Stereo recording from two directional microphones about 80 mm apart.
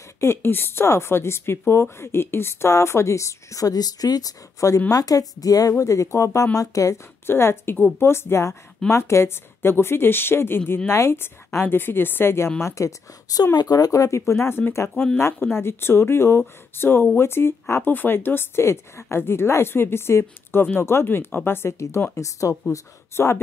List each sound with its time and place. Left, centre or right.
0.2 s speech: left
7.2 s a woman's voice: left